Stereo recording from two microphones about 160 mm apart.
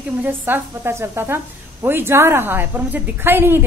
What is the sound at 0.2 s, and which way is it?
A woman's voice, 15° right (ahead or behind).